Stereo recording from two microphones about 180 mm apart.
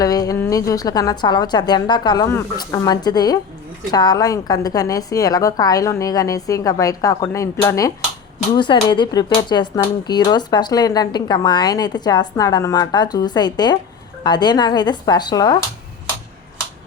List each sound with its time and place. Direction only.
0.0 s speech: 20° left (ahead or behind)